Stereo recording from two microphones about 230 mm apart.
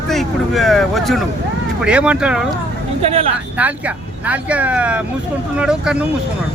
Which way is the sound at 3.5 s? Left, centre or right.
Centre.